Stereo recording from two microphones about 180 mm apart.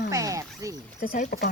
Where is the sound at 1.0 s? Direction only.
50° left (ahead or behind).